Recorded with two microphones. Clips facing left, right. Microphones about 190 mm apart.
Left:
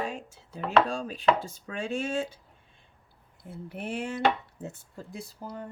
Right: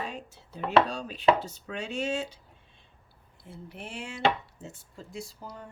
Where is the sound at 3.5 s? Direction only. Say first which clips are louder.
Left 6 dB; 55° left (ahead or behind).